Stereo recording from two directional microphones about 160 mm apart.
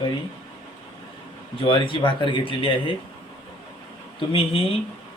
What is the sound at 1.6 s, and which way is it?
Speech, 35° left (ahead or behind).